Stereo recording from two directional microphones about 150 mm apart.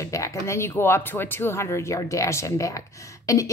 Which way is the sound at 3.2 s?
20° left (ahead or behind).